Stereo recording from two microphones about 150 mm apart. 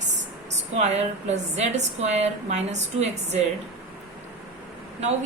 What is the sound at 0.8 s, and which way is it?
A woman's voice, 50° right (ahead or behind).